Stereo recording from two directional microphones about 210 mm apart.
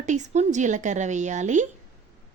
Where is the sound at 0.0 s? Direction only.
35° right (ahead or behind).